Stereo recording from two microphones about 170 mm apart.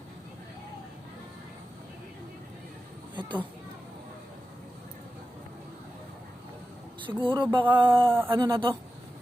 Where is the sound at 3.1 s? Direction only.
30° right (ahead or behind).